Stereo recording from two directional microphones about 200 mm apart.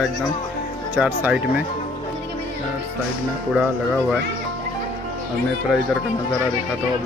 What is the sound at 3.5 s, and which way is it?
Speech, 5° right (ahead or behind).